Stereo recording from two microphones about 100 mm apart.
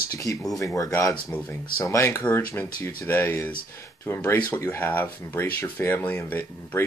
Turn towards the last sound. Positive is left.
turn(degrees=20)  # may be behind; listen again after turning